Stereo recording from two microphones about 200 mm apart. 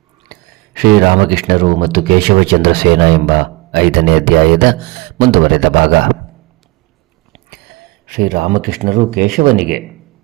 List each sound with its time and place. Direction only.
0.3 s speech: 50° right (ahead or behind)
7.5 s speech: 50° right (ahead or behind)